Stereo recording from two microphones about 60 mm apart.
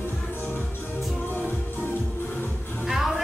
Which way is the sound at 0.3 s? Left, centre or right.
Left.